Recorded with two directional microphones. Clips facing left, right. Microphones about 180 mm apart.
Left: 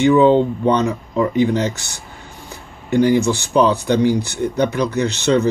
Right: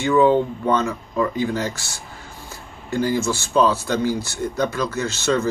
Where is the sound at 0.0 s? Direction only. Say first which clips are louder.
Left 4 dB; 20° left (ahead or behind).